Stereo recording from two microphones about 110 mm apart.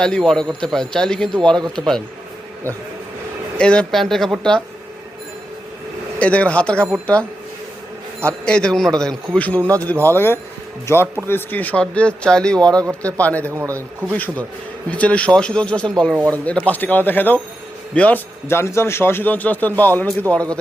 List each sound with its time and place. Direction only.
0.0 s a man's voice: 5° left (ahead or behind)
3.6 s a man's voice: 10° left (ahead or behind)
6.1 s a man's voice: 10° left (ahead or behind)
8.2 s a man's voice: 10° left (ahead or behind)
12.5 s a man's voice: 35° right (ahead or behind)
13.0 s a man's voice: 10° left (ahead or behind)
13.5 s a man's voice: 30° right (ahead or behind)
13.7 s a man's voice: 15° left (ahead or behind)